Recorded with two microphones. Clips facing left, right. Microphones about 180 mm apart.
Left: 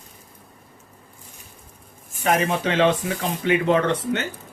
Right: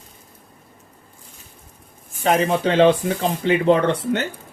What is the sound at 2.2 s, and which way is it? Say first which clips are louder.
Speech: right 3 dB; 30° right (ahead or behind).